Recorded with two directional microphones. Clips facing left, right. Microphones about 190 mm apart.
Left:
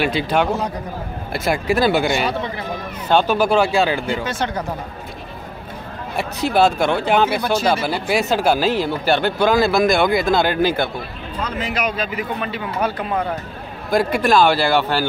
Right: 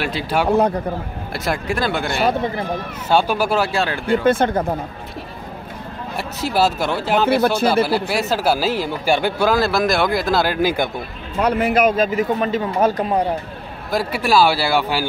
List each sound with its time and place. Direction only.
0.0 s speech: 5° right (ahead or behind)
2.2 s speech: 45° right (ahead or behind)
3.1 s speech: 10° right (ahead or behind)
4.1 s speech: 55° right (ahead or behind)
6.1 s speech: 5° right (ahead or behind)
11.3 s speech: 65° right (ahead or behind); by 13.3 s 35° right (ahead or behind)
13.8 s speech: 5° right (ahead or behind)